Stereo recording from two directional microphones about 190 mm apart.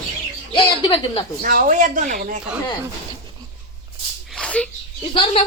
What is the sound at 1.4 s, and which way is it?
Speech, 50° right (ahead or behind).